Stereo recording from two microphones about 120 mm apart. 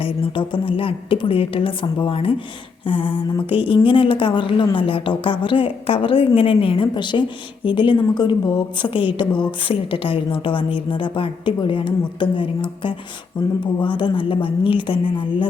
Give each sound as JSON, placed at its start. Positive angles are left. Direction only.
{"t": 0.0, "sound": "a woman's voice", "side_deg": 45}